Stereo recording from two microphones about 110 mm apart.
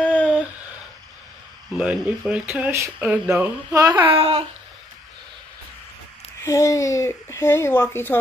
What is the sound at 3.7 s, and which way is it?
Speech, 35° right (ahead or behind).